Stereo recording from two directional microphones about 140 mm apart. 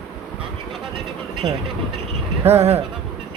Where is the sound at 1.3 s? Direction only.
35° right (ahead or behind).